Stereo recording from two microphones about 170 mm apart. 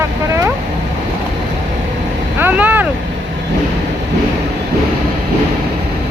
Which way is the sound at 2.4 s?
10° right (ahead or behind).